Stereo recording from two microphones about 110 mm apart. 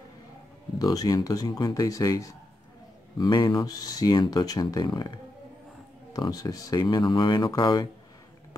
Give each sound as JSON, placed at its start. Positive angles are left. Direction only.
{"t": 0.7, "sound": "speech", "side_deg": 35}
{"t": 3.2, "sound": "speech", "side_deg": 45}